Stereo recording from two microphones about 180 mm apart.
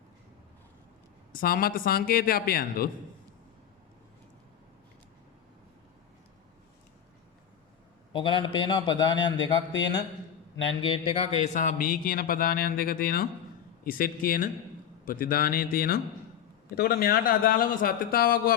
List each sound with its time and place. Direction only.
1.3 s a man's voice: 50° left (ahead or behind)
8.1 s a man's voice: 25° left (ahead or behind)
10.8 s a man's voice: 30° left (ahead or behind)
11.3 s a man's voice: 40° left (ahead or behind)